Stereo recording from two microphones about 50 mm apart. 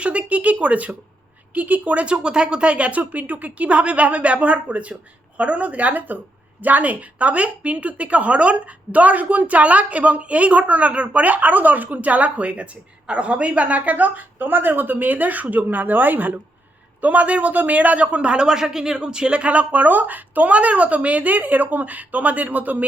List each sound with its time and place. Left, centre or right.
0.0 s speech: right